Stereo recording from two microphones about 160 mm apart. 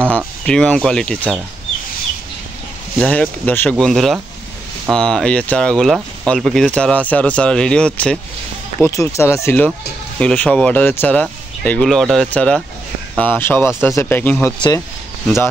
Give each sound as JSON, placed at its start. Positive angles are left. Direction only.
{"t": 0.1, "sound": "speech", "side_deg": 5}
{"t": 3.0, "sound": "speech", "side_deg": 10}
{"t": 8.8, "sound": "speech", "side_deg": 15}
{"t": 13.7, "sound": "speech", "side_deg": -5}
{"t": 13.9, "sound": "speech", "side_deg": 15}